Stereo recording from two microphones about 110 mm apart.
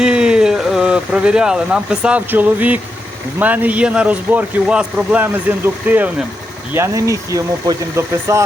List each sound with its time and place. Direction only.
0.0 s speech: 5° right (ahead or behind)
6.7 s speech: 25° right (ahead or behind)